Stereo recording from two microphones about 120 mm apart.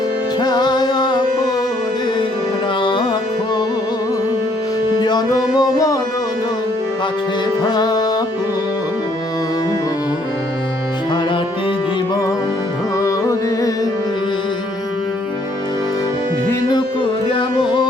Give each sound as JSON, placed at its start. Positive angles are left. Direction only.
{"t": 0.3, "sound": "music", "side_deg": 35}
{"t": 2.8, "sound": "music", "side_deg": 45}
{"t": 4.9, "sound": "music", "side_deg": 35}
{"t": 7.6, "sound": "music", "side_deg": 35}
{"t": 13.0, "sound": "music", "side_deg": 25}
{"t": 16.6, "sound": "music", "side_deg": 40}